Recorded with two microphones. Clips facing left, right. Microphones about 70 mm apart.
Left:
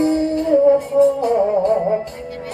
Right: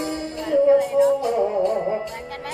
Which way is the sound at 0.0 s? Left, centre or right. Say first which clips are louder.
Left 10 dB; left.